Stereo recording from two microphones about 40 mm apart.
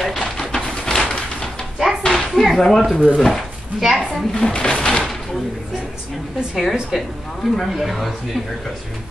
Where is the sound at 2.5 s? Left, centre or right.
Centre.